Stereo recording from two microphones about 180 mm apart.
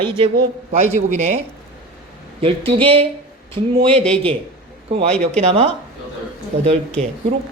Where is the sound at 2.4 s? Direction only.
30° right (ahead or behind).